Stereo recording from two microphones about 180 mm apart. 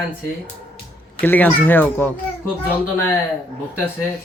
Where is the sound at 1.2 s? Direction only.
10° left (ahead or behind).